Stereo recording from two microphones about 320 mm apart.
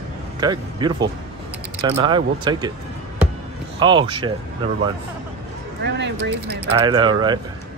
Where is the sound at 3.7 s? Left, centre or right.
Centre.